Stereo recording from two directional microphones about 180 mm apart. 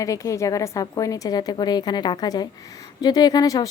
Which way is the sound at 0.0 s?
20° left (ahead or behind).